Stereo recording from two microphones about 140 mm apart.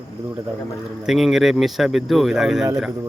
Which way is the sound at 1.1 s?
Centre (ahead or behind).